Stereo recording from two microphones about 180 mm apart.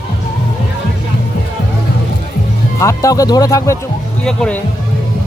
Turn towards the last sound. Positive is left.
turn(degrees=5)  # may be behind; listen again after turning